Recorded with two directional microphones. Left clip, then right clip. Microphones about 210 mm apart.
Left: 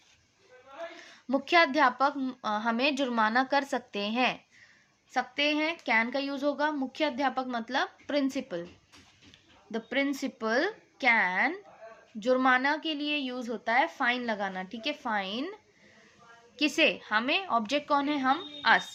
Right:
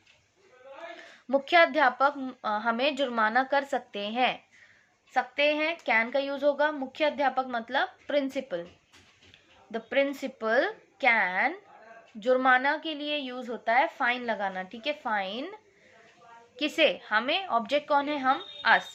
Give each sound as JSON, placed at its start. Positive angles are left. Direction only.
{"t": 0.9, "sound": "speech", "side_deg": 20}
{"t": 9.7, "sound": "speech", "side_deg": 25}
{"t": 16.6, "sound": "speech", "side_deg": 20}